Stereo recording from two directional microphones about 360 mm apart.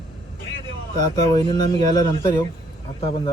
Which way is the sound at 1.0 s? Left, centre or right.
Centre.